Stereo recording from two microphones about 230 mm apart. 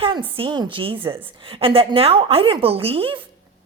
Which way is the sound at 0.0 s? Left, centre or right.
Right.